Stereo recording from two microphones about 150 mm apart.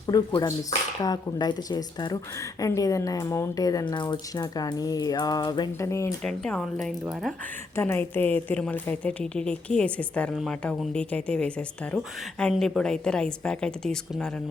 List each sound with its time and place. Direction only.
0.1 s speech: 25° left (ahead or behind)
6.2 s a woman's voice: 5° left (ahead or behind)
7.8 s a woman's voice: 15° left (ahead or behind)